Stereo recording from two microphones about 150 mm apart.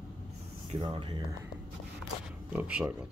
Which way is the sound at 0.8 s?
35° right (ahead or behind).